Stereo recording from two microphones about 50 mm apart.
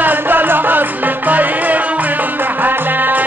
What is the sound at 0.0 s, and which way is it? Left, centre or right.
Music, right.